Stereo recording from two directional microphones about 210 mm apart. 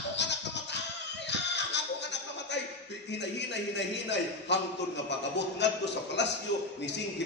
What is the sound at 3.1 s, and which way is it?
A man's voice, 55° left (ahead or behind).